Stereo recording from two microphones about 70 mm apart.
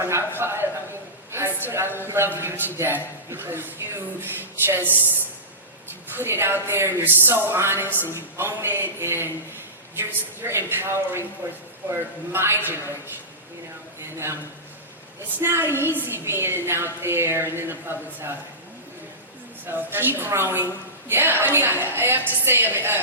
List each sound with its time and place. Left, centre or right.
0.0 s a woman's voice: right
1.3 s a sound: right
2.0 s a woman's voice: right
6.1 s a woman's voice: right
15.4 s a woman's voice: right
19.6 s a woman's voice: right